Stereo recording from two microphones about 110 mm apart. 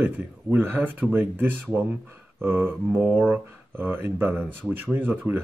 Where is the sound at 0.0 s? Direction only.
20° right (ahead or behind).